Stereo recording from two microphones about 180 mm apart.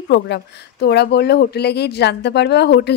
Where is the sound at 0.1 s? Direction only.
65° left (ahead or behind).